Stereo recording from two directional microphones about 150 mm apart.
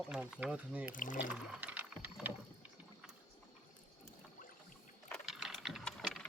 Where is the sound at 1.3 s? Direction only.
10° right (ahead or behind).